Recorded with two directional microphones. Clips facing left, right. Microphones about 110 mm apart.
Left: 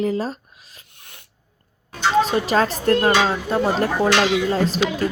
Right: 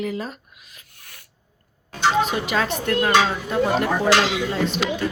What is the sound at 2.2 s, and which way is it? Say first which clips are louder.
Speech: left 4 dB; 35° left (ahead or behind).